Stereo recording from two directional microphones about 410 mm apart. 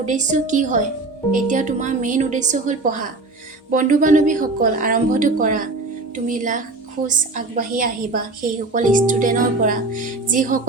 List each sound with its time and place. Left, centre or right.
0.0 s a woman's voice: centre